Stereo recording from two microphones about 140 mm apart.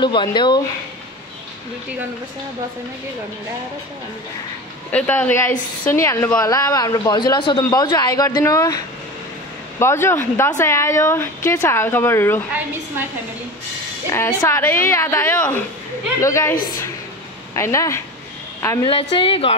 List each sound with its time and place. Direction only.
0.0 s a woman's voice: 35° left (ahead or behind)
4.9 s a woman's voice: 10° left (ahead or behind)
14.1 s a woman's voice: 20° left (ahead or behind)
17.6 s a woman's voice: 20° left (ahead or behind)
18.9 s a woman's voice: 40° left (ahead or behind)